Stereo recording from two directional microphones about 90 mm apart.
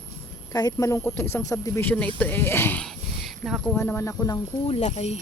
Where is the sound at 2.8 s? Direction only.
Centre (ahead or behind).